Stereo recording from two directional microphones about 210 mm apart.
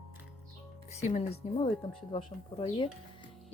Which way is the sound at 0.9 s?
30° left (ahead or behind).